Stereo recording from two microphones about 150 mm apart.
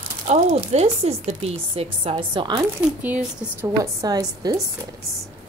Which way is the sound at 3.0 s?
10° right (ahead or behind).